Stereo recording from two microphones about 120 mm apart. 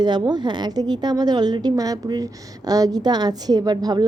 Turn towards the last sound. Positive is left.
turn(degrees=-35)  # may be behind; listen again after turning